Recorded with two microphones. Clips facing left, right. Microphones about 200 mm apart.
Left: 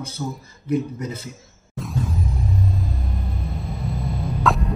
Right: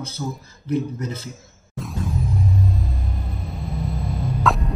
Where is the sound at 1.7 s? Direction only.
Centre (ahead or behind).